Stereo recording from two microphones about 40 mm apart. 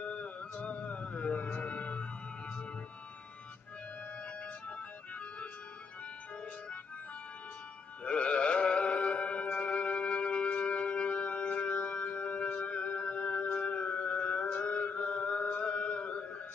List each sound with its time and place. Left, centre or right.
0.0 s a sound: left
1.6 s music: left
8.0 s music: left